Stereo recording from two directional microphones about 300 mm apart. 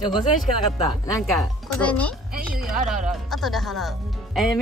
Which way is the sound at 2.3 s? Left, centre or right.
Right.